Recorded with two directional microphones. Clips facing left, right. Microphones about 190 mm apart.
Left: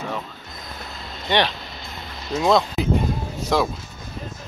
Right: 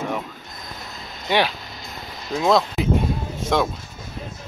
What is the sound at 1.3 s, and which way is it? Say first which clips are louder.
Speech: even; 5° right (ahead or behind).